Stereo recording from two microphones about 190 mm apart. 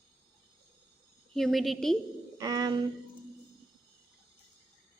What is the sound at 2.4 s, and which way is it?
Speech, 20° right (ahead or behind).